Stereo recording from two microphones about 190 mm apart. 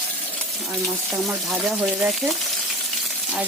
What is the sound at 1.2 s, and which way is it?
Speech, centre (ahead or behind).